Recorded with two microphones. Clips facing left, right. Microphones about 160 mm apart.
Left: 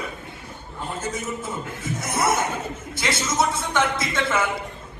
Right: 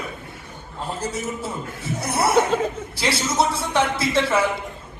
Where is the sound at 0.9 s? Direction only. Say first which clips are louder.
Right 1 dB; 35° right (ahead or behind).